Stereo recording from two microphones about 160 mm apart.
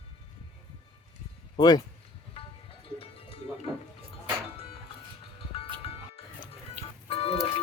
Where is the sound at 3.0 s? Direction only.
35° left (ahead or behind).